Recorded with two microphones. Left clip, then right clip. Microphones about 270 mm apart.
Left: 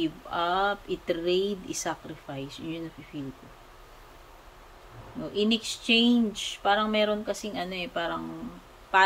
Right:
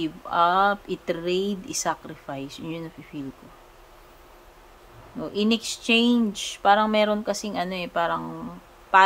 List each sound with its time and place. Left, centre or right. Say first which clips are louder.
0.0 s speech: right 7 dB; centre
5.2 s speech: right 2 dB; centre